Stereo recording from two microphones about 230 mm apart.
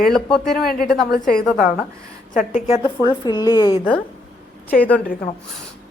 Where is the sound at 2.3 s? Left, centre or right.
Left.